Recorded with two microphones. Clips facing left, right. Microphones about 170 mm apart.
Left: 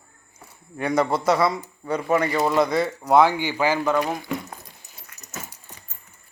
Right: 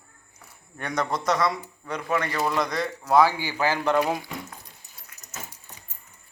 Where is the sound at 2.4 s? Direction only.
30° left (ahead or behind).